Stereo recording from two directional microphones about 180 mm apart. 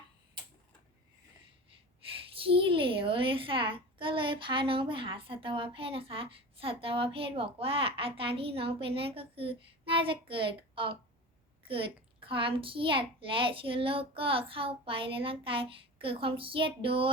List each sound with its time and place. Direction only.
2.3 s a child's voice: 30° right (ahead or behind)
12.2 s a child's voice: 30° right (ahead or behind)